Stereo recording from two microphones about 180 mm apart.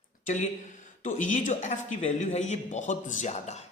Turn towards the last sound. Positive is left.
turn(degrees=40)  # may be behind; listen again after turning